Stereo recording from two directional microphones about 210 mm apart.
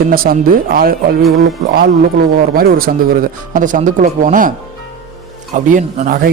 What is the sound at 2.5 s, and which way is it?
Speech, 45° right (ahead or behind).